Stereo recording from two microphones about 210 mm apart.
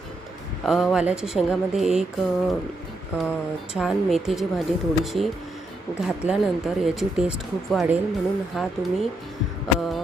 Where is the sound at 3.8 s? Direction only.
Centre (ahead or behind).